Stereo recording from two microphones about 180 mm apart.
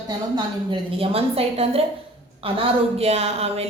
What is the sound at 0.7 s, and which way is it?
A woman's voice, 30° right (ahead or behind).